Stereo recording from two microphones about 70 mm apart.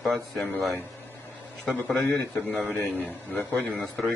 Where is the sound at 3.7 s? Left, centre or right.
Centre.